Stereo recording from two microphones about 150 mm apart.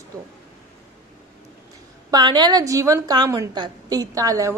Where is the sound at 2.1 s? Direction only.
30° right (ahead or behind).